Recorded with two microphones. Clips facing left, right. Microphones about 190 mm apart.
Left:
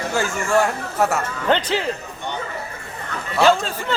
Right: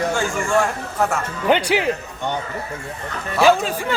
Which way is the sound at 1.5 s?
10° right (ahead or behind).